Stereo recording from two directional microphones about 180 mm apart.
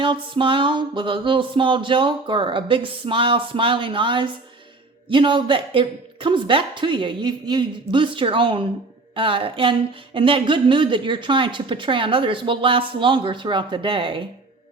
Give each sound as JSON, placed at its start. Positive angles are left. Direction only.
{"t": 0.0, "sound": "music", "side_deg": -30}